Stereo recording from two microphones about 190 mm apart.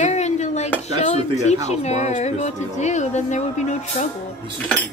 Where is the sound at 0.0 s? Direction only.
35° left (ahead or behind).